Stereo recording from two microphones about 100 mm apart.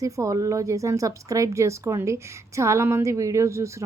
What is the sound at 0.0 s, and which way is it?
A woman's voice, 35° right (ahead or behind).